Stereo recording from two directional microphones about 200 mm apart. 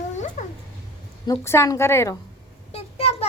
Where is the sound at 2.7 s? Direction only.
30° left (ahead or behind).